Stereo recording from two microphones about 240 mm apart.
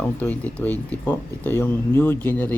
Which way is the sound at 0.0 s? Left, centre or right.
Centre.